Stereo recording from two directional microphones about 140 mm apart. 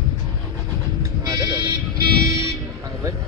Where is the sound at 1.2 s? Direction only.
30° right (ahead or behind).